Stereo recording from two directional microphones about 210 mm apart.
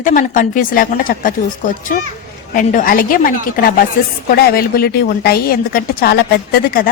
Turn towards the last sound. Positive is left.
turn(degrees=45)  # may be behind; listen again after turning